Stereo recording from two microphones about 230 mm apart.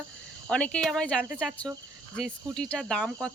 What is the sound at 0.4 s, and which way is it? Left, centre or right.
Speech, centre.